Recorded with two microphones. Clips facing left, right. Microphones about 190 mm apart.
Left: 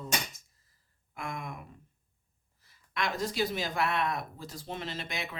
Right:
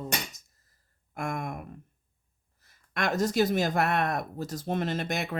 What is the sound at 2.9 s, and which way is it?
Speech, 45° right (ahead or behind).